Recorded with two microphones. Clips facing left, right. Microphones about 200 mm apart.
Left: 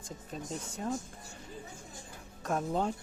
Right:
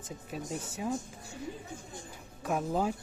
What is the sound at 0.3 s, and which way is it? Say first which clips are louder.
Speech: right 2 dB; 5° right (ahead or behind).